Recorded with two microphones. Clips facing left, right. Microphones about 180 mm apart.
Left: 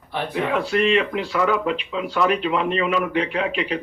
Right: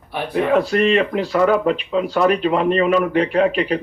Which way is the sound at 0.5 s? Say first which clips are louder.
Right 4 dB; 45° right (ahead or behind).